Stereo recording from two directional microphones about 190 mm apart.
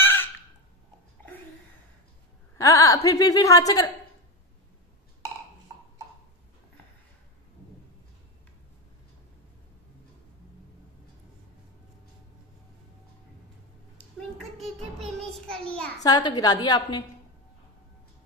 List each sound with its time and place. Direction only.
0.0 s fowl: 10° left (ahead or behind)
2.5 s a woman's voice: 15° left (ahead or behind)
13.9 s a sound: centre (ahead or behind)
16.0 s a woman's voice: 20° left (ahead or behind)